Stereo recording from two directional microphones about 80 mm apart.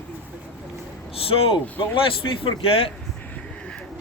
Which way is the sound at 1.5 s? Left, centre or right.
Left.